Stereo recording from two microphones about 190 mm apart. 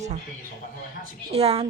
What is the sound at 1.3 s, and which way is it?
Speech, 30° right (ahead or behind).